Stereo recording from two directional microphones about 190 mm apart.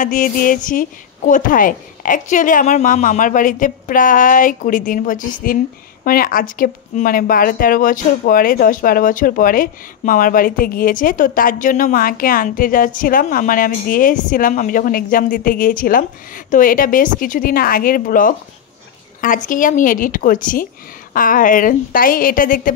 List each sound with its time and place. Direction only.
0.0 s speech: 45° left (ahead or behind)